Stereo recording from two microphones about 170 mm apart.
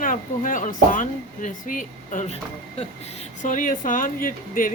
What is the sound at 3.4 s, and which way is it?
Speech, 50° left (ahead or behind).